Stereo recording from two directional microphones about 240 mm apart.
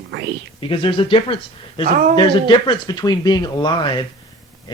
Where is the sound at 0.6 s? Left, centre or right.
Left.